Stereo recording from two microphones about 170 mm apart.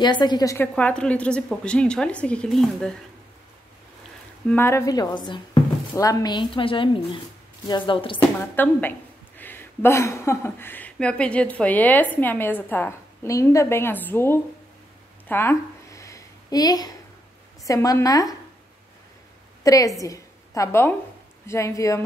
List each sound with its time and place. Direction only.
0.0 s speech: 25° left (ahead or behind)
0.7 s a woman's voice: 5° left (ahead or behind)
4.5 s speech: 15° left (ahead or behind); by 8.2 s 30° left (ahead or behind)
8.2 s speech: 10° left (ahead or behind)
15.2 s a sound: 15° left (ahead or behind)
17.6 s speech: 15° left (ahead or behind)
19.6 s a woman's voice: 20° left (ahead or behind)